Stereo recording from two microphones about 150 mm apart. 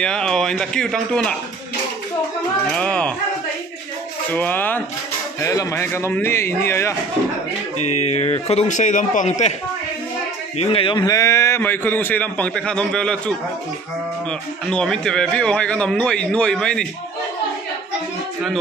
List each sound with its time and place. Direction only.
0.0 s a man's voice: 5° left (ahead or behind)
2.7 s a man's voice: 10° left (ahead or behind)
4.3 s a man's voice: 10° left (ahead or behind)
7.7 s a man's voice: 45° left (ahead or behind)
10.6 s a man's voice: 35° left (ahead or behind); by 13.2 s 5° left (ahead or behind)
14.7 s a man's voice: 5° left (ahead or behind)